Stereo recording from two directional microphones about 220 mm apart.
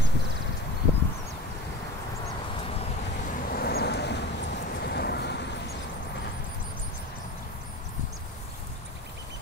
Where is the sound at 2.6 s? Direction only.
25° left (ahead or behind).